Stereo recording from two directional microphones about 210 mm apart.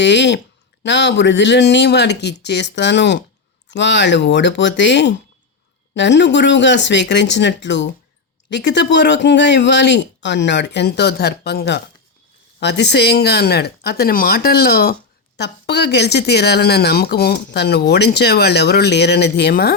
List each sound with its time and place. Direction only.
0.0 s speech: 55° left (ahead or behind)